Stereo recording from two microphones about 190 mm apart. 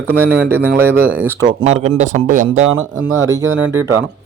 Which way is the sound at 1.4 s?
25° right (ahead or behind).